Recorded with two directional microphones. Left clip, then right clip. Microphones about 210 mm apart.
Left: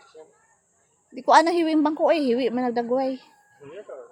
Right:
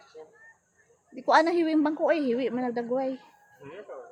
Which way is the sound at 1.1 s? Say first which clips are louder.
Left 5 dB; 40° left (ahead or behind).